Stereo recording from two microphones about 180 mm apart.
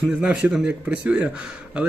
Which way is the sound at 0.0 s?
5° right (ahead or behind).